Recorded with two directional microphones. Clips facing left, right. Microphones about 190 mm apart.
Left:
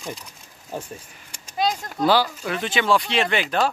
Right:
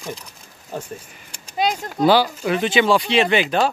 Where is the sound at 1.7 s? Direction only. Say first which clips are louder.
Right 4 dB; 20° right (ahead or behind).